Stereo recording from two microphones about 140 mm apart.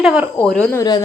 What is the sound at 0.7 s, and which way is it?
Speech, 30° left (ahead or behind).